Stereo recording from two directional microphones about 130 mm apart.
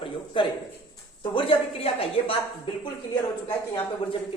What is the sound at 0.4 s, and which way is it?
A woman's voice, 40° left (ahead or behind).